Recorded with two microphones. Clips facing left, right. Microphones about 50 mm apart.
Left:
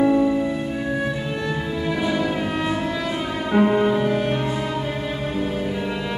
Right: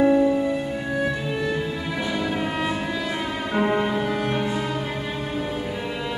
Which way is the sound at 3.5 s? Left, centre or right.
Centre.